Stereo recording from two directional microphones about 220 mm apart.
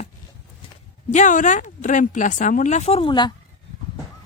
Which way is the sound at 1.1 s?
35° left (ahead or behind).